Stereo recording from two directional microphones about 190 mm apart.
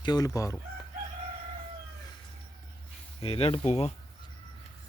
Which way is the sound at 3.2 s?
30° left (ahead or behind).